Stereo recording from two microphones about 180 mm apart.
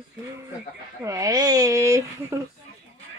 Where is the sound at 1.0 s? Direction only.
20° right (ahead or behind).